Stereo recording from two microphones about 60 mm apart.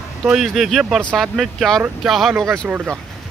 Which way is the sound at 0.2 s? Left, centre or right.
Centre.